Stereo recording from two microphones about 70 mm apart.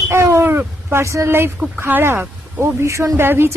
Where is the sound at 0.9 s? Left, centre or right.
Right.